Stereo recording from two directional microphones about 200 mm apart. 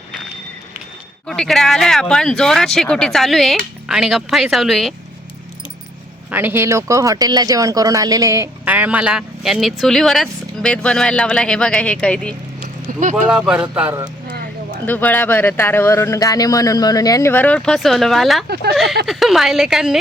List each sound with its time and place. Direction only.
1.3 s speech: centre (ahead or behind)
6.3 s speech: 10° right (ahead or behind); by 12.3 s 5° left (ahead or behind)
13.0 s speech: 40° right (ahead or behind)
13.2 s speech: 5° right (ahead or behind)
14.3 s a sound: 45° right (ahead or behind)
14.8 s speech: 10° left (ahead or behind)
18.4 s speech: 55° right (ahead or behind)
19.0 s speech: centre (ahead or behind)